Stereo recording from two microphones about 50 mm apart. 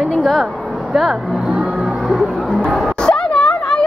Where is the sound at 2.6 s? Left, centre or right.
Centre.